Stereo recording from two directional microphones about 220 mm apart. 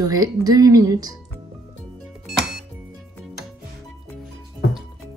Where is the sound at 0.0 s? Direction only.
15° right (ahead or behind).